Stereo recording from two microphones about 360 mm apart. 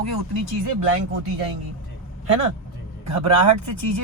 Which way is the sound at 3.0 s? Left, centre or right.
Right.